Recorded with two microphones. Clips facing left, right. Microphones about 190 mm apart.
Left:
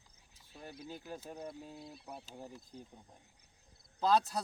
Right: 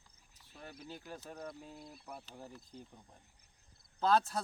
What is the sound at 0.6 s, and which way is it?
Speech, 15° left (ahead or behind).